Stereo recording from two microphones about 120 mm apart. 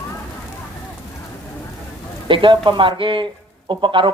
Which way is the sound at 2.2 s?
45° right (ahead or behind).